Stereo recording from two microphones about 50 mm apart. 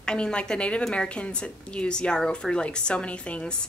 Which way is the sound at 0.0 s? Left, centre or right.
Centre.